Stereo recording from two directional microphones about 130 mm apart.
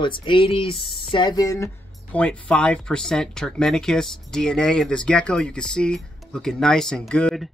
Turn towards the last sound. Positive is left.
turn(degrees=5)  # may be behind; listen again after turning